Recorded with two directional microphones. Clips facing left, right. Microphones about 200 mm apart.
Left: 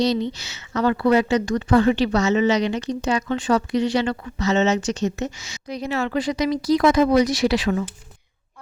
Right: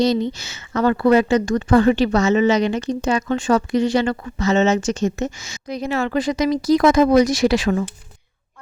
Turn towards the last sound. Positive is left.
turn(degrees=-45)  # may be behind; listen again after turning